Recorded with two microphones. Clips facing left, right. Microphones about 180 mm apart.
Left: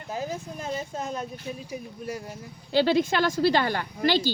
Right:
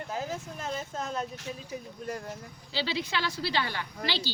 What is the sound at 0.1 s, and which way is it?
Speech, 15° left (ahead or behind).